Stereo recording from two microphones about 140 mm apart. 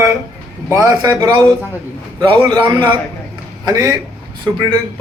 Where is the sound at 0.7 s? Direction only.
25° right (ahead or behind).